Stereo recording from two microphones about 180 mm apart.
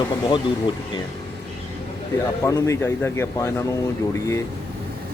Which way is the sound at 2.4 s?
15° left (ahead or behind).